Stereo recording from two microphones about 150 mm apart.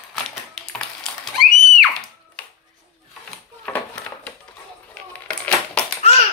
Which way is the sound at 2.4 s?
5° left (ahead or behind).